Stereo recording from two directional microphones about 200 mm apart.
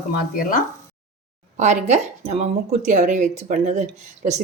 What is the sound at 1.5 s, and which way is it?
Speech, 35° right (ahead or behind).